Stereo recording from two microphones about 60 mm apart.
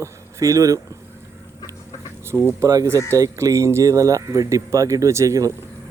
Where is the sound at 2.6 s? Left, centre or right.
Right.